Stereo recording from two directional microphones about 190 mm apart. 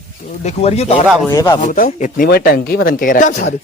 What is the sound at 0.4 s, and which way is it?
Speech, 35° left (ahead or behind).